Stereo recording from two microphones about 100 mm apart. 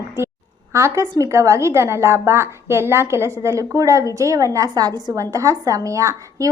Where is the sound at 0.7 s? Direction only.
30° right (ahead or behind).